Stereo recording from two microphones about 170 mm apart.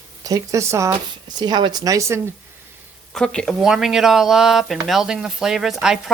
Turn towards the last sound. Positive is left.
turn(degrees=0)  # may be behind; listen again after turning